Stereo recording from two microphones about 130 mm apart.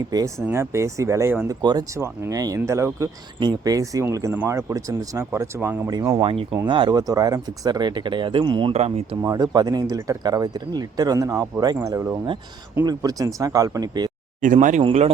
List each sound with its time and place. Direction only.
0.1 s speech: 30° right (ahead or behind)
0.4 s speech: 20° right (ahead or behind)
1.6 s speech: 30° right (ahead or behind)
2.0 s speech: 20° right (ahead or behind)
6.2 s speech: 45° right (ahead or behind)
8.7 s speech: 55° right (ahead or behind)
9.2 s speech: 30° right (ahead or behind)
14.4 s speech: 80° right